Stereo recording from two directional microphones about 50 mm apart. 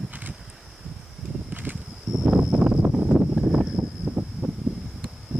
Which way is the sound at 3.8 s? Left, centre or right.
Right.